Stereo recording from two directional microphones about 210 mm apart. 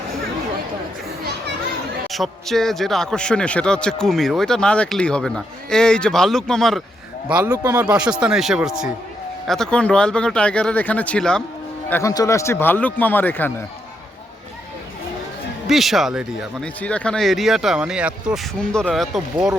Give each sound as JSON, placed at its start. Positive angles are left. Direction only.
{"t": 2.1, "sound": "speech", "side_deg": 0}
{"t": 15.6, "sound": "speech", "side_deg": 0}